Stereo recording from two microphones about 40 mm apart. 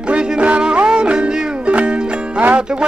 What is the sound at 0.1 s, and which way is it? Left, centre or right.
Music, right.